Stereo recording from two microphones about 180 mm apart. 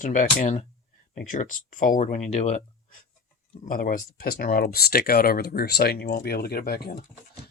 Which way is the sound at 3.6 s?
50° left (ahead or behind).